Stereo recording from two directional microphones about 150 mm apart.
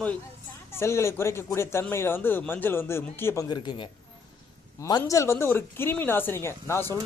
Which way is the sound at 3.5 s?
30° left (ahead or behind).